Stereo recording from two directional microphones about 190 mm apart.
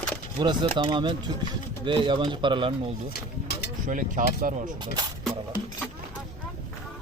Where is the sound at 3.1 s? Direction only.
55° left (ahead or behind).